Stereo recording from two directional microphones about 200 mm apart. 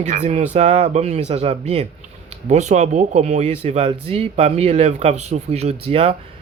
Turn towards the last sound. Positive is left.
turn(degrees=-30)  # may be behind; listen again after turning